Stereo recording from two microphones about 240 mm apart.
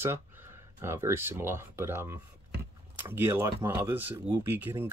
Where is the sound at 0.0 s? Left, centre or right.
Centre.